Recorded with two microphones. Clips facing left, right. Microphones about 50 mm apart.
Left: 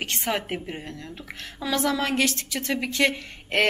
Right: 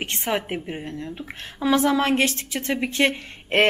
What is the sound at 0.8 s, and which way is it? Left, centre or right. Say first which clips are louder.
A woman's voice: right 5 dB; right.